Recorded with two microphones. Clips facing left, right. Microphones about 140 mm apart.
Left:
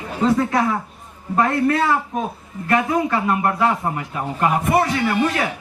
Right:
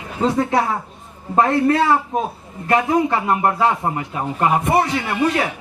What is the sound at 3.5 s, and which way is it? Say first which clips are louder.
Speech: right 1 dB; 25° right (ahead or behind).